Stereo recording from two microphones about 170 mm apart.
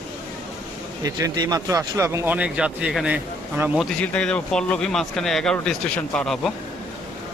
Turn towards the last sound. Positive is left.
turn(degrees=5)  # may be behind; listen again after turning